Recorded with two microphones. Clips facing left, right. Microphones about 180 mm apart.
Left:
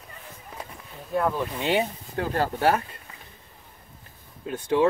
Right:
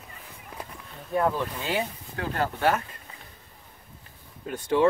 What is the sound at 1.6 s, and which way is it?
Speech, 25° left (ahead or behind).